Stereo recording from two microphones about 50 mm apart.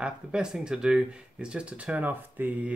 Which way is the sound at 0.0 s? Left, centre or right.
Centre.